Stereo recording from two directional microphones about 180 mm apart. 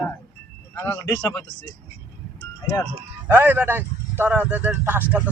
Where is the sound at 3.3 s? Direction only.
10° right (ahead or behind).